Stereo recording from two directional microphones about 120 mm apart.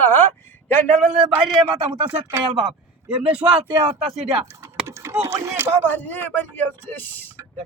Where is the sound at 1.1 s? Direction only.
5° right (ahead or behind).